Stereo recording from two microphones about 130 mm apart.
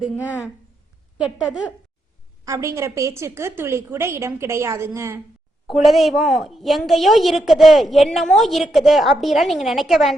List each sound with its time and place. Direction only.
2.4 s a woman's voice: 25° right (ahead or behind)
5.6 s a woman's voice: centre (ahead or behind)